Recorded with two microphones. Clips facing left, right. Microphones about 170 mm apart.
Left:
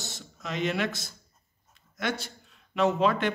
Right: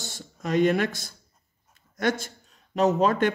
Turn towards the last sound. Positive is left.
turn(degrees=-45)  # may be behind; listen again after turning